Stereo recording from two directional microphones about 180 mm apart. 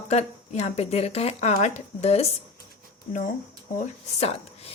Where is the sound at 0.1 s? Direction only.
40° left (ahead or behind).